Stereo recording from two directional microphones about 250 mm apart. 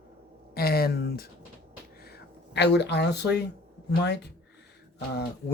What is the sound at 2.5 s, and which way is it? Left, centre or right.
Speech, left.